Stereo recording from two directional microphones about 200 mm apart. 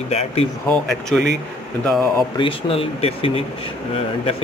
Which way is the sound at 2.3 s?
25° left (ahead or behind).